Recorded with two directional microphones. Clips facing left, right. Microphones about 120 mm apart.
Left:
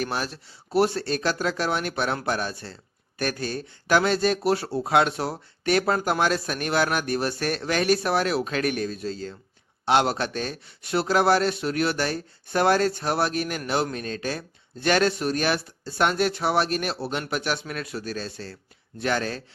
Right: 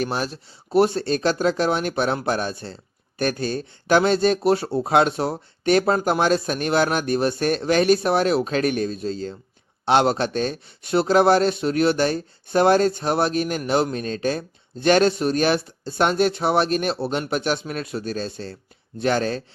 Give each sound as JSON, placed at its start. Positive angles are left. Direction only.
{"t": 0.0, "sound": "speech", "side_deg": -25}